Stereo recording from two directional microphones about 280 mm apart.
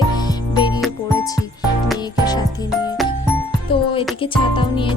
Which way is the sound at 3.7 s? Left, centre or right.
Centre.